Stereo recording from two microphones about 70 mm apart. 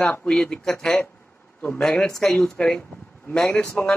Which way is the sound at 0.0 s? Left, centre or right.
Centre.